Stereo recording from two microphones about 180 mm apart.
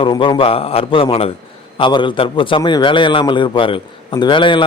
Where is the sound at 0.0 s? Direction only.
25° left (ahead or behind).